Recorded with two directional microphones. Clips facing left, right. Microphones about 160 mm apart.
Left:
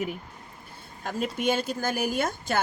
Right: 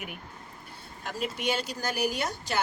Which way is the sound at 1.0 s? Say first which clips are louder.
Left 4 dB; 45° left (ahead or behind).